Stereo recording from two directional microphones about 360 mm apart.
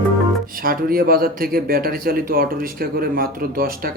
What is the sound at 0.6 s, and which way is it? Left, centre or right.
Speech, right.